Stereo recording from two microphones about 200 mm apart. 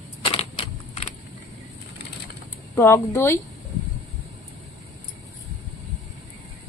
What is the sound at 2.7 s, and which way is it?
Speech, 15° left (ahead or behind).